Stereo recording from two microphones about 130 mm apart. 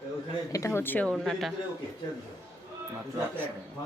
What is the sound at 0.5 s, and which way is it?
Speech, 20° left (ahead or behind).